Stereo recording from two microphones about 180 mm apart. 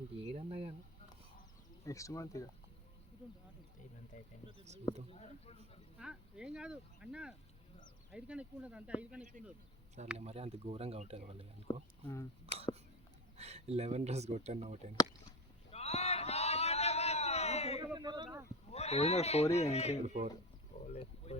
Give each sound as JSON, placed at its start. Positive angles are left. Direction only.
{"t": 0.2, "sound": "speech", "side_deg": -30}
{"t": 1.8, "sound": "speech", "side_deg": 15}
{"t": 4.5, "sound": "speech", "side_deg": -40}
{"t": 5.1, "sound": "speech", "side_deg": 35}
{"t": 6.0, "sound": "speech", "side_deg": -5}
{"t": 10.2, "sound": "speech", "side_deg": -35}
{"t": 11.7, "sound": "speech", "side_deg": 20}
{"t": 13.3, "sound": "speech", "side_deg": -35}
{"t": 15.7, "sound": "a sound", "side_deg": 35}
{"t": 17.9, "sound": "a man's voice", "side_deg": -25}
{"t": 18.7, "sound": "speech", "side_deg": 35}